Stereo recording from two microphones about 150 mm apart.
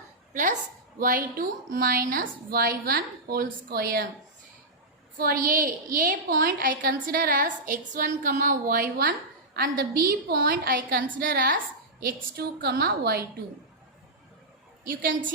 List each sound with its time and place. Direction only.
0.9 s a woman's voice: 65° right (ahead or behind); by 4.0 s 85° right
5.1 s a woman's voice: 75° right (ahead or behind)
9.6 s a woman's voice: 90° right; by 11.6 s 75° right (ahead or behind)
12.0 s a woman's voice: 90° right